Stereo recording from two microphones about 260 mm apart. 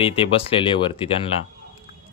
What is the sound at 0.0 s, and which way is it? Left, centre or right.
Speech, centre.